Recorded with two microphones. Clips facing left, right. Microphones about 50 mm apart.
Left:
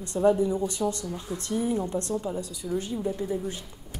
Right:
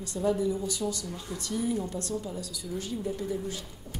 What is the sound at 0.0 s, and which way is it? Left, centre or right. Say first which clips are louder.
A woman's voice: left 5 dB; left.